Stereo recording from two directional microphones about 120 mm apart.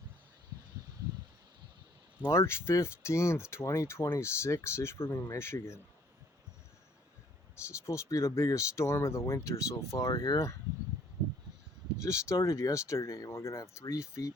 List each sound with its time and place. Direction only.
2.2 s speech: 25° left (ahead or behind)
7.5 s speech: 25° left (ahead or behind)
12.0 s speech: 25° left (ahead or behind)